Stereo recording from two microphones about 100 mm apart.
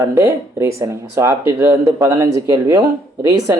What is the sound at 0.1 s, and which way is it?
Speech, 25° right (ahead or behind).